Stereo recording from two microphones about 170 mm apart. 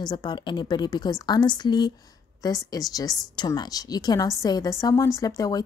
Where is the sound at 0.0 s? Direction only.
25° left (ahead or behind).